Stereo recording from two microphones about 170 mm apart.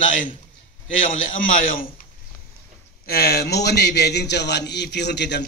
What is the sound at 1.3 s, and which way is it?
Speech, 55° left (ahead or behind).